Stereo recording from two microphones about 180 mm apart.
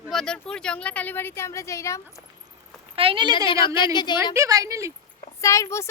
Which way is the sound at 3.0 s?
30° right (ahead or behind).